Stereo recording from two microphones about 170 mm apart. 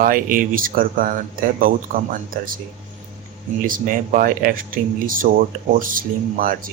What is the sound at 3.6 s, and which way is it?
Speech, 55° right (ahead or behind).